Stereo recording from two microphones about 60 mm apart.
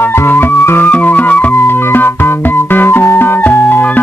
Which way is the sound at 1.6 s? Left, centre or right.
Left.